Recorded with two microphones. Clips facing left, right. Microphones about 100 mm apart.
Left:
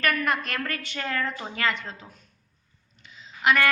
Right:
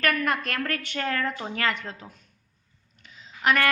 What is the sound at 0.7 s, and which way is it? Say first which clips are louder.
A woman's voice: right 2 dB; 50° right (ahead or behind).